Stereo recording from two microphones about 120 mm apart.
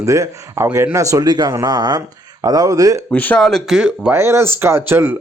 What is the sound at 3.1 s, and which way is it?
Speech, 10° left (ahead or behind).